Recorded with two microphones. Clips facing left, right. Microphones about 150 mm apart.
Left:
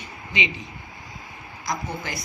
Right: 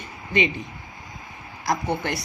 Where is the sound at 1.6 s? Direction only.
65° right (ahead or behind).